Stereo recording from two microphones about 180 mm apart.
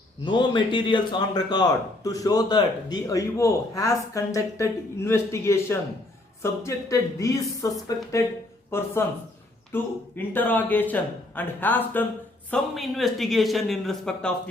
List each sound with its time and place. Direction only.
0.3 s a man's voice: 25° left (ahead or behind); by 14.3 s 5° left (ahead or behind)